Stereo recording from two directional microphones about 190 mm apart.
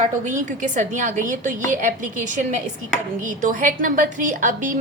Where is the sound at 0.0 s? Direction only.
40° right (ahead or behind).